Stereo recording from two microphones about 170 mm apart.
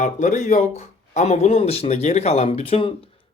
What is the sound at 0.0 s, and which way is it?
Speech, 45° left (ahead or behind).